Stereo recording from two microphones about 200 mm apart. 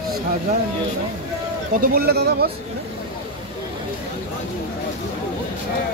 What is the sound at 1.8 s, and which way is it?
Speech, 50° right (ahead or behind).